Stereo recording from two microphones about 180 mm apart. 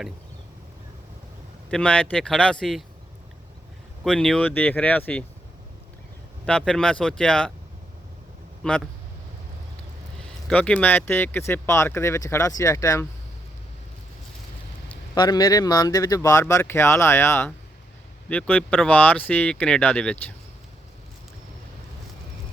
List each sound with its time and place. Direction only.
1.7 s speech: 5° left (ahead or behind)
4.0 s speech: 5° left (ahead or behind)
6.4 s speech: 5° left (ahead or behind)
8.6 s speech: 5° left (ahead or behind)
10.5 s speech: 5° left (ahead or behind)
15.1 s speech: 20° left (ahead or behind); by 20.1 s 5° left (ahead or behind)